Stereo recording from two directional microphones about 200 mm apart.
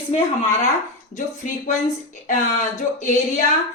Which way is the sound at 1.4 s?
40° left (ahead or behind).